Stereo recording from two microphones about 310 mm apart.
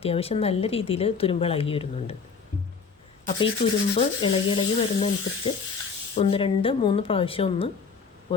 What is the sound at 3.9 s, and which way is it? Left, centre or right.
Speech, centre.